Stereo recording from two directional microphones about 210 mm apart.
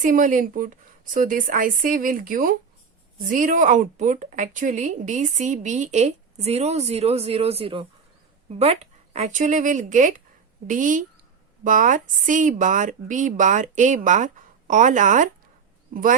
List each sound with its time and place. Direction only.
0.0 s a woman's voice: 40° right (ahead or behind)